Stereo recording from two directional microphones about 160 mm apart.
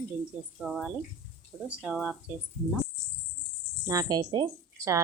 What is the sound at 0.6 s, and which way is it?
Speech, centre (ahead or behind).